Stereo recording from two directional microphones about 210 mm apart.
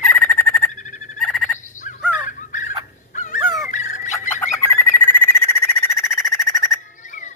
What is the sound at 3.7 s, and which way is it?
Turkey, 35° left (ahead or behind).